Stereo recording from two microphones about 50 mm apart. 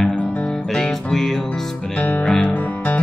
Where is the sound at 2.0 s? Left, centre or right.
Left.